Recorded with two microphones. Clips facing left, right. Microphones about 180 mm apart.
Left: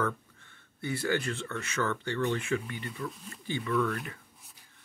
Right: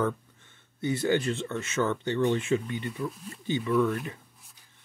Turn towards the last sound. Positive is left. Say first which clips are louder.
# right 5 dB
turn(degrees=-20)  # may be behind; listen again after turning